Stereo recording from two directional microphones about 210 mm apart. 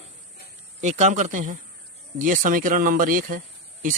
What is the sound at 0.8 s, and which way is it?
Speech, 35° right (ahead or behind).